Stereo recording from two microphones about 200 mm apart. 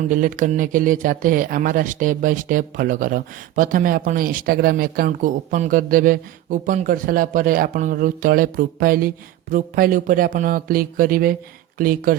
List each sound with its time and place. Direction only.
0.0 s speech: 45° right (ahead or behind)